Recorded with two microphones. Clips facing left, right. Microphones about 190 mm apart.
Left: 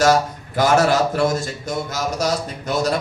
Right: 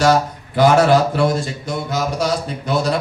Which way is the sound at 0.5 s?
45° left (ahead or behind).